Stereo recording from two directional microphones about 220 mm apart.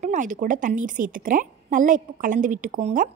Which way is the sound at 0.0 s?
35° right (ahead or behind).